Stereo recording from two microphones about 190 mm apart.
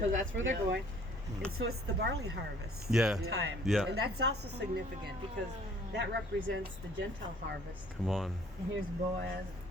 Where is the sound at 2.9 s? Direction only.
5° right (ahead or behind).